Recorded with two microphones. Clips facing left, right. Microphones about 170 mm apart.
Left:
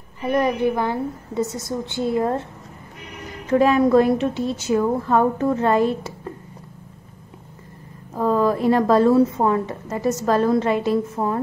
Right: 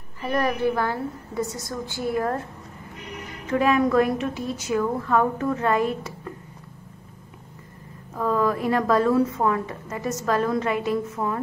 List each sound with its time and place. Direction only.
0.2 s a woman's voice: 20° left (ahead or behind)
3.5 s a woman's voice: 30° left (ahead or behind)
8.1 s a woman's voice: 30° left (ahead or behind)